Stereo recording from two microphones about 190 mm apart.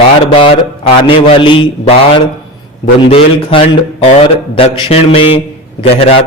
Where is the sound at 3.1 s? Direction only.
30° left (ahead or behind).